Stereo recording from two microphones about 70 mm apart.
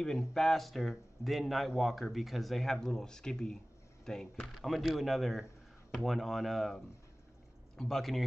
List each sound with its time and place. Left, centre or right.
0.3 s speech: centre